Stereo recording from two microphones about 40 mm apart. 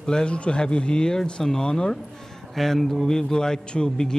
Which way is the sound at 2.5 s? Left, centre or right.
Centre.